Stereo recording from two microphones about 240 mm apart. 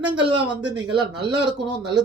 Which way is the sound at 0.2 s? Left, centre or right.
Centre.